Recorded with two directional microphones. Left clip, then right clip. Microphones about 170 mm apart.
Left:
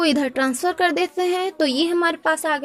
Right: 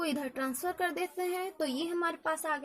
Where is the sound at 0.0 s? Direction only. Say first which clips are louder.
Left 14 dB; 40° left (ahead or behind).